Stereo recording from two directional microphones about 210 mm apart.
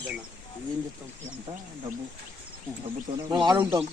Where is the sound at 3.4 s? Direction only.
15° right (ahead or behind).